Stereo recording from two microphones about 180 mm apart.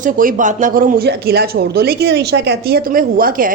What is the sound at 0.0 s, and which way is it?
Speech, 50° right (ahead or behind).